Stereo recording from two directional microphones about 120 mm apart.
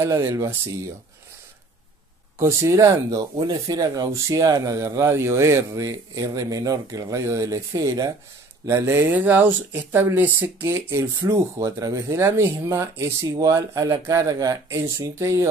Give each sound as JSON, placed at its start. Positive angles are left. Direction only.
{"t": 0.0, "sound": "speech", "side_deg": -25}
{"t": 2.3, "sound": "speech", "side_deg": -25}